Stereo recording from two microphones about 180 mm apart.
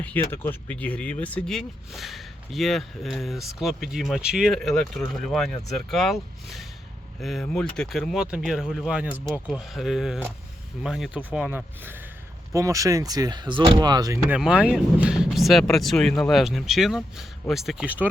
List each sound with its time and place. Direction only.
0.0 s speech: 10° left (ahead or behind); by 14.2 s 20° right (ahead or behind)
14.3 s speech: 5° right (ahead or behind)